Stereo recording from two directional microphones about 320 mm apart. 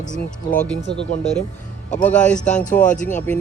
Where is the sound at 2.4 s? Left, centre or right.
Left.